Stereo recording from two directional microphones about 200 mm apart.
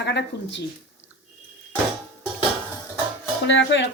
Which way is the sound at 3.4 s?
65° left (ahead or behind).